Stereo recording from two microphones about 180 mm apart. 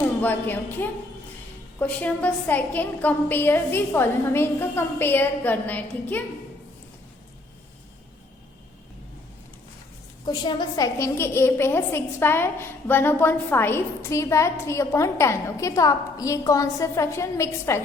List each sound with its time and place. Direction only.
0.2 s a woman's voice: 10° left (ahead or behind)
10.2 s a woman's voice: 25° left (ahead or behind)